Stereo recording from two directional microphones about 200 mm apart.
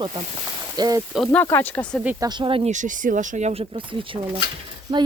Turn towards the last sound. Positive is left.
turn(degrees=-20)  # may be behind; listen again after turning